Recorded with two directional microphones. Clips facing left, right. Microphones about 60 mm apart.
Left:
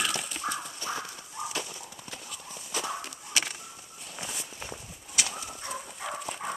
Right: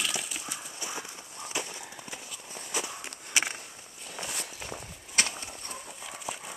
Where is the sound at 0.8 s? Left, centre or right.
Centre.